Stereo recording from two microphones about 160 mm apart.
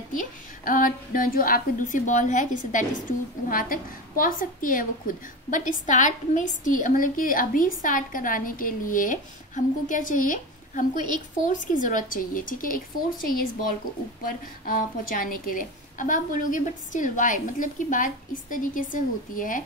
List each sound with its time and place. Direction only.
0.1 s a woman's voice: 55° left (ahead or behind)
14.2 s a woman's voice: 60° left (ahead or behind)